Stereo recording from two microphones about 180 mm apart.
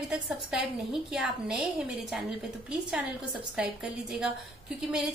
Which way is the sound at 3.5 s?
5° right (ahead or behind).